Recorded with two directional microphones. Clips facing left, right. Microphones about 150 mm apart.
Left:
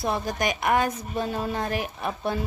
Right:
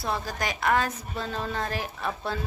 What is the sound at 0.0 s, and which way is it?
A woman's voice, 20° left (ahead or behind).